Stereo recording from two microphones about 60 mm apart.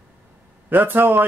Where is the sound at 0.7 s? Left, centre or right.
Right.